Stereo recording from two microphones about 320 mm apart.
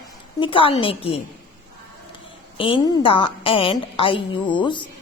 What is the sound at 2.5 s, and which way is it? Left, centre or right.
A woman's voice, centre.